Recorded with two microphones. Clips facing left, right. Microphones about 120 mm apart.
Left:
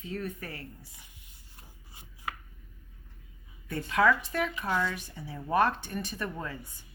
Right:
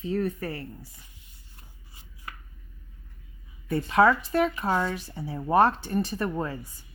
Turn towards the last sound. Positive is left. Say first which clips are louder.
# right 7 dB
turn(degrees=-35)  # may be behind; listen again after turning